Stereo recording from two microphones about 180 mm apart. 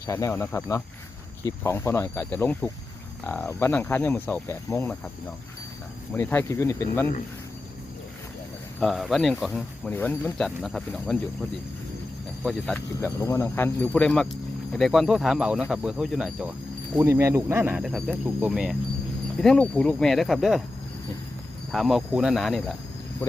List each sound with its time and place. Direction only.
0.1 s speech: 15° left (ahead or behind)
6.1 s speech: 10° left (ahead or behind)
8.8 s speech: centre (ahead or behind)
12.5 s speech: 5° left (ahead or behind)
16.9 s speech: 15° right (ahead or behind)
21.7 s speech: centre (ahead or behind)